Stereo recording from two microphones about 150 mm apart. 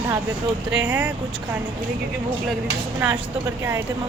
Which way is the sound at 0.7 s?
15° right (ahead or behind).